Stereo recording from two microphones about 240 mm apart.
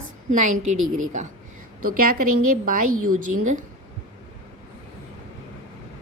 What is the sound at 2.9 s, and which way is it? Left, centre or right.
Speech, right.